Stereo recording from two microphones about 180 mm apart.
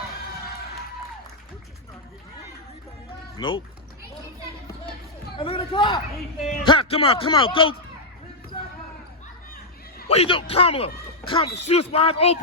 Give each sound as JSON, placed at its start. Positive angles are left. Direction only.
{"t": 3.3, "sound": "speech", "side_deg": 25}
{"t": 5.4, "sound": "a man's voice", "side_deg": 30}
{"t": 10.1, "sound": "a man's voice", "side_deg": 30}